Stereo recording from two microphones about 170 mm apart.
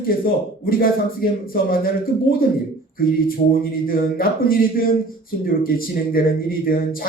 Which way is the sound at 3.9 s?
60° left (ahead or behind).